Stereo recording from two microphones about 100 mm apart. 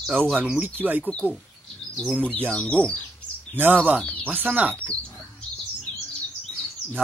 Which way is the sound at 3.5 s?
20° right (ahead or behind).